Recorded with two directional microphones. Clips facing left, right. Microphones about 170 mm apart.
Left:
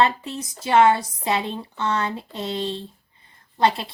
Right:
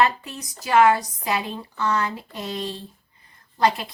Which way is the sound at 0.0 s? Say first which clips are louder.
Left 1 dB; 30° left (ahead or behind).